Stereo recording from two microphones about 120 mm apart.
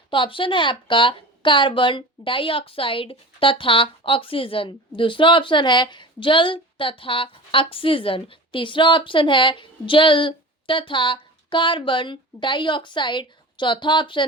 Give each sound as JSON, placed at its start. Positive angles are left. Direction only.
{"t": 0.1, "sound": "a woman's voice", "side_deg": 45}